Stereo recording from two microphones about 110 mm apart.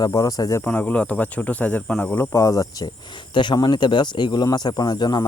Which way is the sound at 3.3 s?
45° left (ahead or behind).